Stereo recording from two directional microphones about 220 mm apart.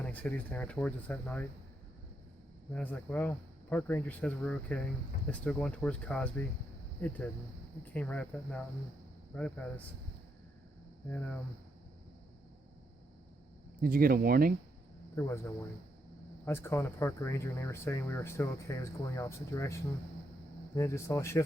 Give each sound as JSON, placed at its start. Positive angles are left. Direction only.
{"t": 0.0, "sound": "speech", "side_deg": 5}
{"t": 2.7, "sound": "speech", "side_deg": 5}
{"t": 11.1, "sound": "speech", "side_deg": 10}
{"t": 13.8, "sound": "speech", "side_deg": -40}
{"t": 15.1, "sound": "speech", "side_deg": 15}
{"t": 16.5, "sound": "speech", "side_deg": 10}